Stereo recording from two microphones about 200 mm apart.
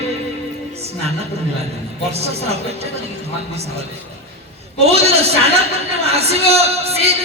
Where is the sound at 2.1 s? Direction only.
30° right (ahead or behind).